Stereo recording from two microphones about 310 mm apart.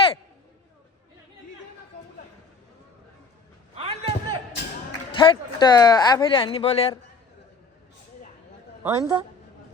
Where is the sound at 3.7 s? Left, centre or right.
Centre.